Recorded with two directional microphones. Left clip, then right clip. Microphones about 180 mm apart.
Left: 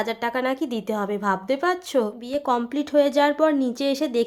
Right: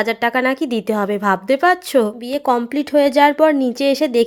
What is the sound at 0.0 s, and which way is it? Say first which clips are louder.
A woman's voice: right 8 dB; 30° right (ahead or behind).